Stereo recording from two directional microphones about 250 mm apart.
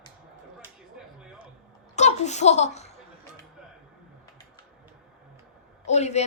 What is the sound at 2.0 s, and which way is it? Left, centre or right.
Speech, left.